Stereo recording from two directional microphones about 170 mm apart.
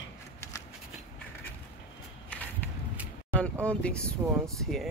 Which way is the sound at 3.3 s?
5° left (ahead or behind).